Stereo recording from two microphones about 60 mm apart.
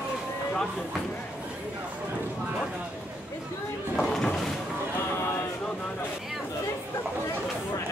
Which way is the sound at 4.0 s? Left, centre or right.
Centre.